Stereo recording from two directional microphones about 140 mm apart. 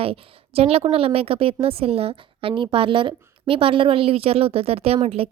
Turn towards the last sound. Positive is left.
turn(degrees=-45)  # may be behind; listen again after turning